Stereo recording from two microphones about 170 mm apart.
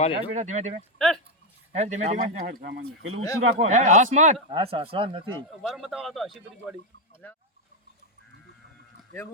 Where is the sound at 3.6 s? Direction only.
45° right (ahead or behind).